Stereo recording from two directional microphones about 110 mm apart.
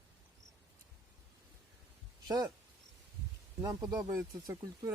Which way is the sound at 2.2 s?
35° right (ahead or behind).